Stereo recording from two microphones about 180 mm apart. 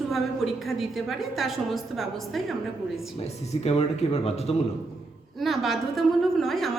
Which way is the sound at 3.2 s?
35° left (ahead or behind).